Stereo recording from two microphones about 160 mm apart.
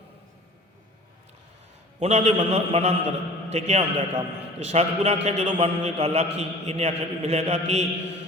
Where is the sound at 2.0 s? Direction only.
45° right (ahead or behind).